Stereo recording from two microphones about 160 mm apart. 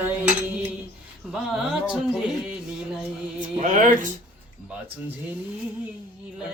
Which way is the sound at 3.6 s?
55° right (ahead or behind).